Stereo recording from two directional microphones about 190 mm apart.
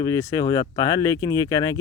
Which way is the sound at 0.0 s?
15° left (ahead or behind).